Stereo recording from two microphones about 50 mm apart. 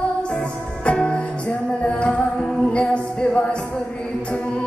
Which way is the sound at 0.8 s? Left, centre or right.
Centre.